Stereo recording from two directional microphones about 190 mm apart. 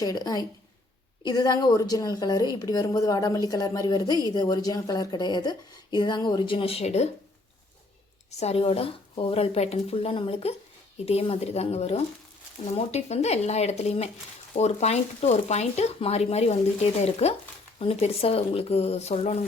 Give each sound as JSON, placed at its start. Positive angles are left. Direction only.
{"t": 0.0, "sound": "a woman's voice", "side_deg": 20}
{"t": 8.3, "sound": "speech", "side_deg": 35}